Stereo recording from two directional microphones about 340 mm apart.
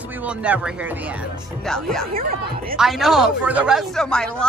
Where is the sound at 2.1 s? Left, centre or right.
Right.